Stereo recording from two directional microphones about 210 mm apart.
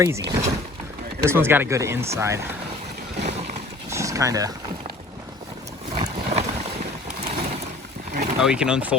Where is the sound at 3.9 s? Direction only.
15° right (ahead or behind).